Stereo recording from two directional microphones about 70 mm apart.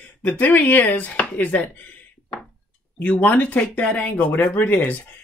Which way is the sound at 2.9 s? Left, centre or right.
Centre.